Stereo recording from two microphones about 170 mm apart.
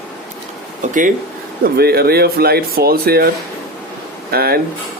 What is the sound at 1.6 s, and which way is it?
Speech, 65° right (ahead or behind).